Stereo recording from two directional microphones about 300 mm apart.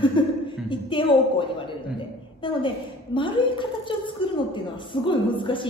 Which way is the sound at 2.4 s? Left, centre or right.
Centre.